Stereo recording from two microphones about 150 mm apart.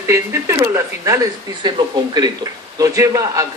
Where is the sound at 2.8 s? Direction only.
20° right (ahead or behind).